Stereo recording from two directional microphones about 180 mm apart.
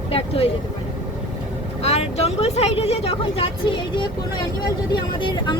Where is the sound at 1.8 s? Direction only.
35° left (ahead or behind).